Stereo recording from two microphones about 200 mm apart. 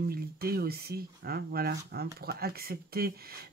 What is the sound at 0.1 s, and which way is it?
Speech, 50° right (ahead or behind).